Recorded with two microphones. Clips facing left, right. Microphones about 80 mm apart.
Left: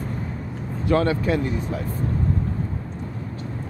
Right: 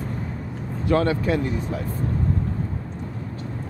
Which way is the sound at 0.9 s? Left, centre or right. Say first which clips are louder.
Even; left.